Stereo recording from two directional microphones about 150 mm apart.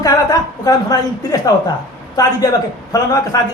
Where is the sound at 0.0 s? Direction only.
25° left (ahead or behind).